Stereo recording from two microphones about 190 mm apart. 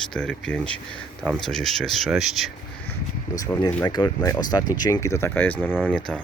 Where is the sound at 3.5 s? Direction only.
20° left (ahead or behind).